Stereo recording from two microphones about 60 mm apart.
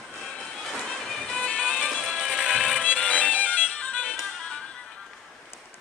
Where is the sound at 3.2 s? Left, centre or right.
Left.